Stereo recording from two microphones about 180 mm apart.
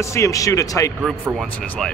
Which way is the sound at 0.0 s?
15° left (ahead or behind).